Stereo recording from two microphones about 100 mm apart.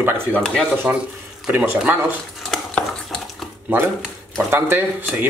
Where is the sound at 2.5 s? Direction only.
5° left (ahead or behind).